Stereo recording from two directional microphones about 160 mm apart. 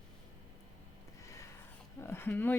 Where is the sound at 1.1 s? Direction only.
20° left (ahead or behind).